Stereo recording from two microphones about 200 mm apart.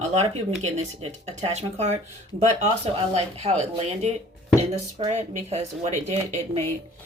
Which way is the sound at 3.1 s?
30° right (ahead or behind).